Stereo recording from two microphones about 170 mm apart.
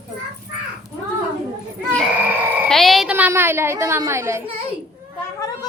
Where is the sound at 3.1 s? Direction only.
10° right (ahead or behind).